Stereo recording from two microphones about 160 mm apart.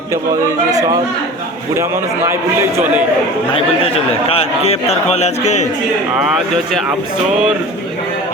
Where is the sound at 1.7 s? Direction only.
15° right (ahead or behind).